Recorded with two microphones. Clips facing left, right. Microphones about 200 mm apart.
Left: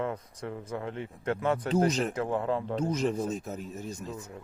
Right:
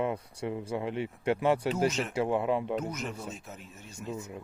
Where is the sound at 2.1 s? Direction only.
15° right (ahead or behind).